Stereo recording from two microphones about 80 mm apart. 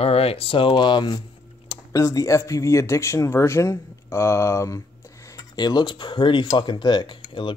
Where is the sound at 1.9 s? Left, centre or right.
Left.